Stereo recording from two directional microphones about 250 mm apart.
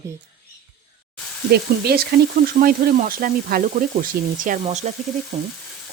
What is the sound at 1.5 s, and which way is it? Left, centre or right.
Speech, right.